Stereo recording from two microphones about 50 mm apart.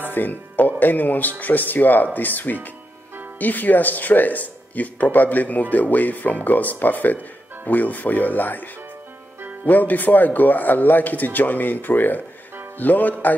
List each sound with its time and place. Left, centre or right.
0.1 s speech: left
9.7 s speech: left